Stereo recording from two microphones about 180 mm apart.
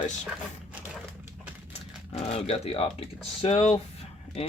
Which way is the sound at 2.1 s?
35° left (ahead or behind).